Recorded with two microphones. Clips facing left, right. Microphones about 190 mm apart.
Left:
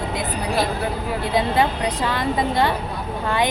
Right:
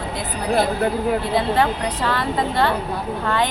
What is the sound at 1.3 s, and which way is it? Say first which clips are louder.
Speech: left 4 dB; 15° left (ahead or behind).